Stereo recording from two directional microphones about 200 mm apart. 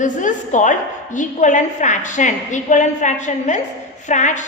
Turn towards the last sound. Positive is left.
turn(degrees=35)  # may be behind; listen again after turning